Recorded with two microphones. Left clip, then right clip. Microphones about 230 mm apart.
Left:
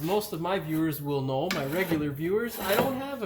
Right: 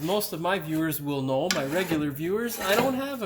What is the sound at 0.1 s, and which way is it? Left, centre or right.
Dishes, right.